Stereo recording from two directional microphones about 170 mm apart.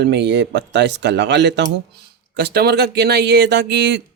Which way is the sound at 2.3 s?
75° right (ahead or behind).